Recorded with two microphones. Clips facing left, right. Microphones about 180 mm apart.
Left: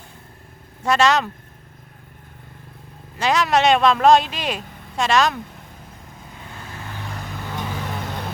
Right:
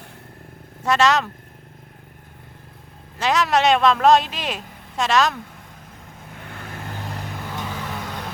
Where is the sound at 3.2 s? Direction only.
Centre (ahead or behind).